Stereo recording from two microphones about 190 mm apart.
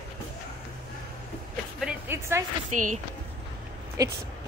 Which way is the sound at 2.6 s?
40° right (ahead or behind).